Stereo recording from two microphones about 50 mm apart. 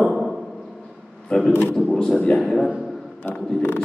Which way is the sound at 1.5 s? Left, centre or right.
Left.